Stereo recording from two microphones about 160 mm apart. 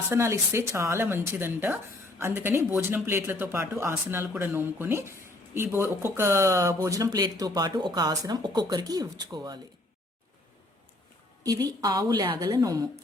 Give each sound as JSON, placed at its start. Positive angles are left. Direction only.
{"t": 0.1, "sound": "speech", "side_deg": -15}
{"t": 11.4, "sound": "speech", "side_deg": -25}